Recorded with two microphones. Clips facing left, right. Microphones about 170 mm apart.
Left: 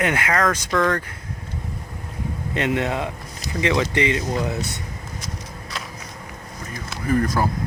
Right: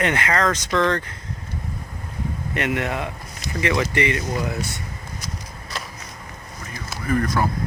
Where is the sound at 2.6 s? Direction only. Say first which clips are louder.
Left 2 dB; 20° left (ahead or behind).